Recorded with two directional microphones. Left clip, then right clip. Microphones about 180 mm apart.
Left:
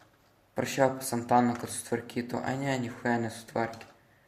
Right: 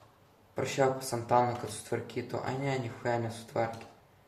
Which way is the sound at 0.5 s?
45° left (ahead or behind).